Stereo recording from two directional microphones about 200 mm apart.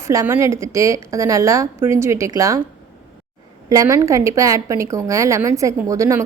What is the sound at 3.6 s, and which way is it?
A woman's voice, 15° right (ahead or behind).